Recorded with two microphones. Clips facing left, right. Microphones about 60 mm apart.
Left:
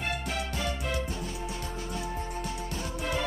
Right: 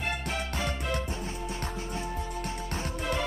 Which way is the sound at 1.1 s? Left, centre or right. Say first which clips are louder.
Even; right.